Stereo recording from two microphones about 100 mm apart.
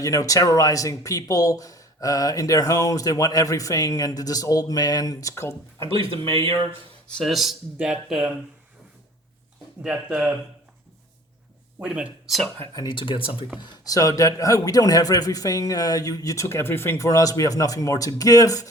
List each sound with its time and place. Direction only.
0.0 s speech: 35° left (ahead or behind)
7.1 s speech: 5° left (ahead or behind)
9.8 s speech: 10° right (ahead or behind)
11.8 s speech: 10° right (ahead or behind)
12.7 s speech: 45° left (ahead or behind)
13.8 s speech: 35° left (ahead or behind)